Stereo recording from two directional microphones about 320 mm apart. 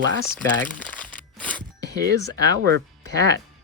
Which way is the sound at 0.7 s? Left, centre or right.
Centre.